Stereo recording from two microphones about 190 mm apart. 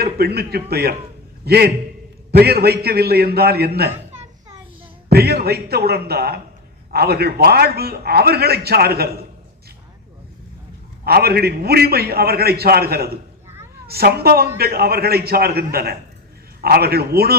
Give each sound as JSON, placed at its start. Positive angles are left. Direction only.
{"t": 0.0, "sound": "a man's voice", "side_deg": -55}
{"t": 5.1, "sound": "a man's voice", "side_deg": -55}
{"t": 11.0, "sound": "a man's voice", "side_deg": -55}